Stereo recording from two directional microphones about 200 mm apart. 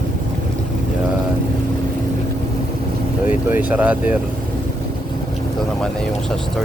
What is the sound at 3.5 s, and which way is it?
Speech, 10° right (ahead or behind).